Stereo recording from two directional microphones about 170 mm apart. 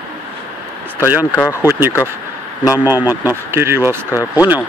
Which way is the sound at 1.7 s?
15° right (ahead or behind).